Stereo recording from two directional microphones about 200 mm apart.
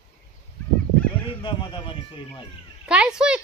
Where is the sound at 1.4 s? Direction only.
25° left (ahead or behind).